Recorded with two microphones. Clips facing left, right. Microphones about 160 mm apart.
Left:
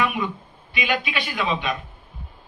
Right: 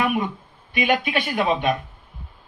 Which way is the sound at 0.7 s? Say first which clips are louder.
Right 4 dB; 50° right (ahead or behind).